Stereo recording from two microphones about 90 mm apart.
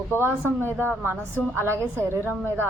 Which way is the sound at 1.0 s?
25° right (ahead or behind).